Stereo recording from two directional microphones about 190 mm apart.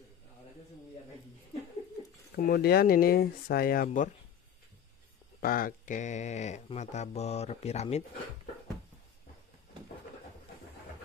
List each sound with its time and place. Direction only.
2.3 s speech: 55° left (ahead or behind)
5.4 s speech: 50° left (ahead or behind)